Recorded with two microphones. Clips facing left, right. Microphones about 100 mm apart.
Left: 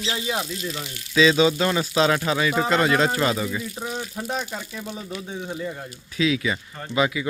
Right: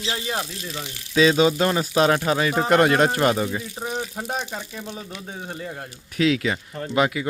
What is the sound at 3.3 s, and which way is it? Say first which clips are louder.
Speech: right 2 dB; 30° right (ahead or behind).